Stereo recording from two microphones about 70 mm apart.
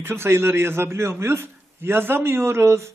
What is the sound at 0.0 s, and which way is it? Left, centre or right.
A man's voice, right.